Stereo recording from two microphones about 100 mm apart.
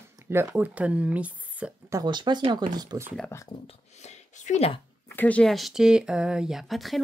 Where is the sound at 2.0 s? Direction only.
50° right (ahead or behind).